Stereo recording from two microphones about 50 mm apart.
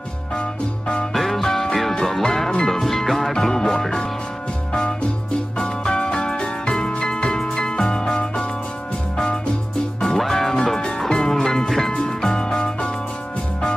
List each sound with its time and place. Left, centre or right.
1.1 s music: centre
5.6 s music: centre
10.0 s music: centre
10.5 s music: centre